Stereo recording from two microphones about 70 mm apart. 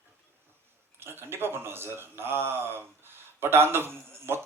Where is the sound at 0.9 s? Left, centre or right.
Right.